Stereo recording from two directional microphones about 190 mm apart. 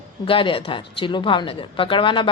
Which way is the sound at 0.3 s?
30° left (ahead or behind).